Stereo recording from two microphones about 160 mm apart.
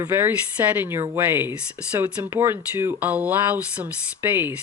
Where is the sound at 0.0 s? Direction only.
15° right (ahead or behind).